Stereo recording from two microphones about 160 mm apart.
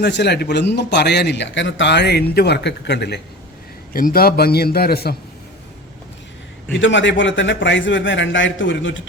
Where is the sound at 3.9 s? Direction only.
65° left (ahead or behind).